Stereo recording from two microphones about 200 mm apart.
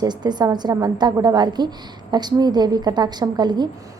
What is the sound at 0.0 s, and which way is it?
A woman's voice, 20° right (ahead or behind).